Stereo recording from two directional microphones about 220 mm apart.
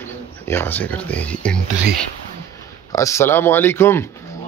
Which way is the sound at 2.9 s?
15° left (ahead or behind).